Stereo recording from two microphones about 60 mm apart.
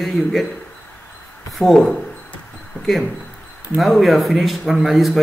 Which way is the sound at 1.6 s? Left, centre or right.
Centre.